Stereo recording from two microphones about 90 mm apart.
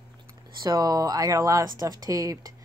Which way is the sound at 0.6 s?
45° right (ahead or behind).